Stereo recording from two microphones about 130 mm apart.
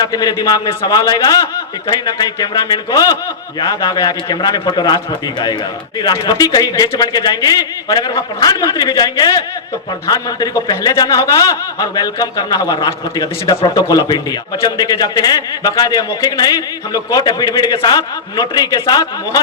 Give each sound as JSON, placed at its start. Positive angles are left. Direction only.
{"t": 0.0, "sound": "a man's voice", "side_deg": 30}
{"t": 6.0, "sound": "a man's voice", "side_deg": 30}